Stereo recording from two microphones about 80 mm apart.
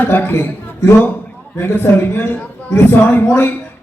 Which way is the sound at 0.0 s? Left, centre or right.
Left.